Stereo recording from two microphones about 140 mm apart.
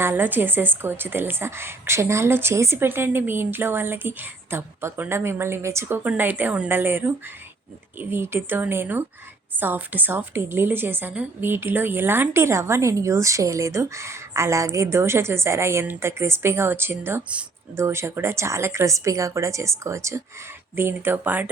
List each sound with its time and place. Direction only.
0.0 s a woman's voice: 15° right (ahead or behind)